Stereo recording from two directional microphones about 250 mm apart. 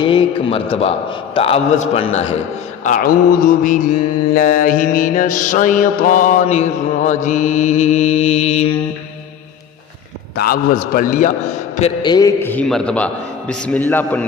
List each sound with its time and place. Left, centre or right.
0.0 s a man's voice: centre
2.8 s mantra: left
10.3 s mantra: left
11.8 s a man's voice: centre